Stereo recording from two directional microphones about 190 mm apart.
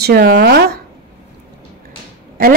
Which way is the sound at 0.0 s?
60° right (ahead or behind).